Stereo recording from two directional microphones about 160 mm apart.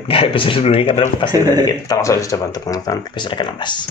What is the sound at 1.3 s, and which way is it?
Speech, 25° right (ahead or behind).